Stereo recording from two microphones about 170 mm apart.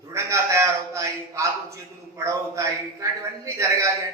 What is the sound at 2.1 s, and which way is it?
A man's voice, 20° right (ahead or behind).